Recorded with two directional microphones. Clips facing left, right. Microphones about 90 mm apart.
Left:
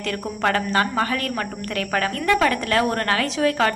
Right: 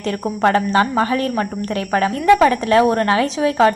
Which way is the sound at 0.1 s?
25° right (ahead or behind).